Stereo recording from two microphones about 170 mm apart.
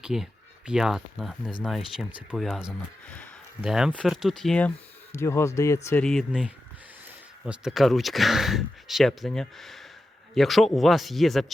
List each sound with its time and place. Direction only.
0.0 s speech: 5° right (ahead or behind)
5.1 s speech: 15° left (ahead or behind)
6.0 s speech: centre (ahead or behind)